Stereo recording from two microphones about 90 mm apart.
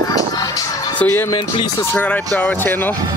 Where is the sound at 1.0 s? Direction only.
25° left (ahead or behind).